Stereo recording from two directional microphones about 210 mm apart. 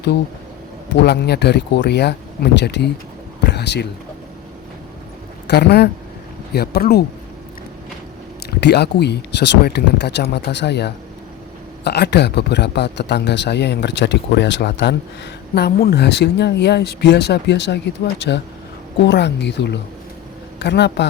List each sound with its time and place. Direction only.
0.9 s speech: 50° left (ahead or behind)
3.4 s pigeon: 55° left (ahead or behind)
5.5 s speech: 50° left (ahead or behind)
8.4 s speech: 50° left (ahead or behind)